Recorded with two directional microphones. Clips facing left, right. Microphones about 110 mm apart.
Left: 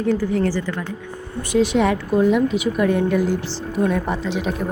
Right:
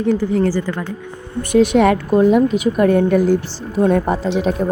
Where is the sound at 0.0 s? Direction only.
25° right (ahead or behind).